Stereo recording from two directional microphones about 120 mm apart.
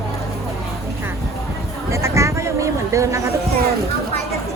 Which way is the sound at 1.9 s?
25° right (ahead or behind).